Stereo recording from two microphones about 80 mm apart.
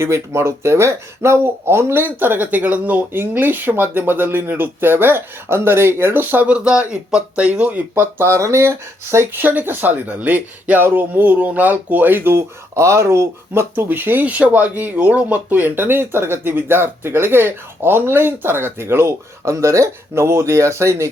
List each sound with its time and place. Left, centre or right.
0.0 s speech: right